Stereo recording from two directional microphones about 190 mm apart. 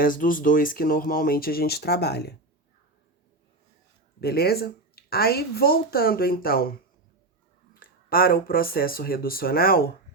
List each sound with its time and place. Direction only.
0.0 s speech: 45° left (ahead or behind)
4.2 s speech: 55° left (ahead or behind)
7.7 s speech: 50° left (ahead or behind)